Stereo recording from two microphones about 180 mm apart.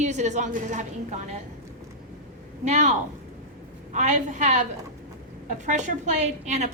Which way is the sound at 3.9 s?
40° right (ahead or behind).